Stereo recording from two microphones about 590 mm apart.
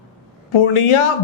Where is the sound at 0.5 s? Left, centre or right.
Left.